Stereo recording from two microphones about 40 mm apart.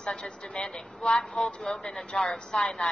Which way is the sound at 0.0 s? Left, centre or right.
Left.